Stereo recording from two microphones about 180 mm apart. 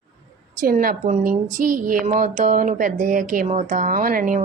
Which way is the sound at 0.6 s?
50° right (ahead or behind).